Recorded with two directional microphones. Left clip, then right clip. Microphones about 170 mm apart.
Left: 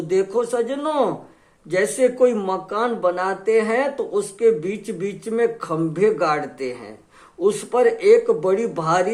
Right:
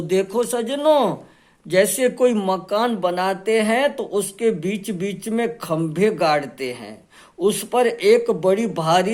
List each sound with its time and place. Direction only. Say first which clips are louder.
0.1 s speech: even; 30° right (ahead or behind)